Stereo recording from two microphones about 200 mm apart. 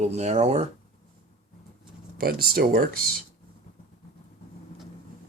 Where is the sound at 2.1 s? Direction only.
50° right (ahead or behind).